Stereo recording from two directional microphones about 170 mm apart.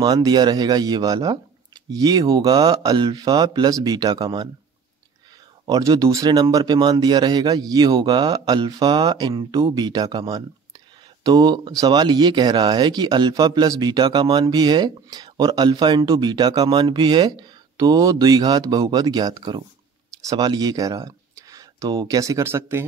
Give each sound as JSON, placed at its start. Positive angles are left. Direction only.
{"t": 0.0, "sound": "speech", "side_deg": -25}
{"t": 5.7, "sound": "speech", "side_deg": -20}